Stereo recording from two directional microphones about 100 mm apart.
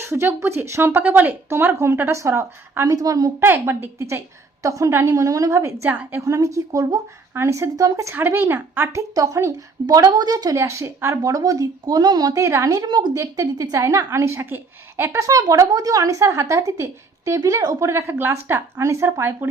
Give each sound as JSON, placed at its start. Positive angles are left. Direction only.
{"t": 0.0, "sound": "a woman's voice", "side_deg": -25}
{"t": 2.8, "sound": "a woman's voice", "side_deg": -40}
{"t": 3.4, "sound": "a woman's voice", "side_deg": -20}
{"t": 6.2, "sound": "a woman's voice", "side_deg": -30}
{"t": 8.1, "sound": "a woman's voice", "side_deg": -20}
{"t": 10.6, "sound": "a woman's voice", "side_deg": -30}